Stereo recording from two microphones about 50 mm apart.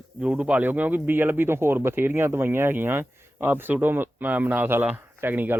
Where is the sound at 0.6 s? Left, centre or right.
Right.